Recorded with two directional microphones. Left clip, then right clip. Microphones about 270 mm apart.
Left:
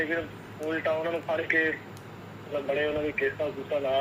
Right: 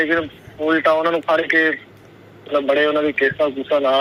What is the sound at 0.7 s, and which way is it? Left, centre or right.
A man's voice, right.